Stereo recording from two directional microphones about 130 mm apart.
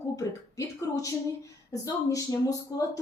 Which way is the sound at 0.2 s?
25° left (ahead or behind).